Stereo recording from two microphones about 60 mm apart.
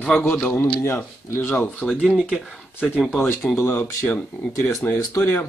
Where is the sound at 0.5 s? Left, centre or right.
Left.